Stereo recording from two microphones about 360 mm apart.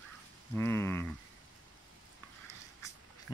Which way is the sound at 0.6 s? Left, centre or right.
Centre.